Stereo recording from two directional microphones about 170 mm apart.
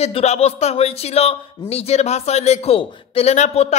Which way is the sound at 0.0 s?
40° left (ahead or behind).